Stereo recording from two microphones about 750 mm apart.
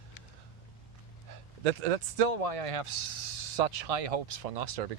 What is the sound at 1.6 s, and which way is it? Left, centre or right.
Speech, right.